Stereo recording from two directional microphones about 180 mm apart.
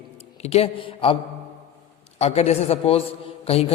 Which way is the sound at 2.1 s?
35° left (ahead or behind).